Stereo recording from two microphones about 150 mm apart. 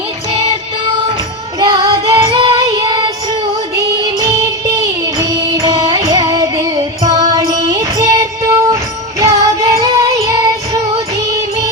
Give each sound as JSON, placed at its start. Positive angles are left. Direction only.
{"t": 1.5, "sound": "child singing", "side_deg": -25}
{"t": 4.0, "sound": "music", "side_deg": -25}